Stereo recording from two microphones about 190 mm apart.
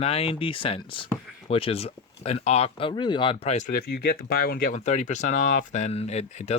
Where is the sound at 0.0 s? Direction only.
30° left (ahead or behind).